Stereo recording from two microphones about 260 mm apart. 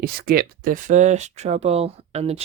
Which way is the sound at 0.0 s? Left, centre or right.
Right.